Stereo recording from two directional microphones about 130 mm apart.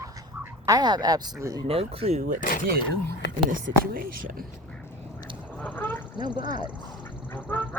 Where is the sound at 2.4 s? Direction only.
90° left.